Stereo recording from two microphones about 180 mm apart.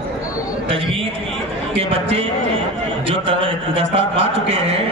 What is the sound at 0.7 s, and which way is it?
A man's voice, 30° right (ahead or behind).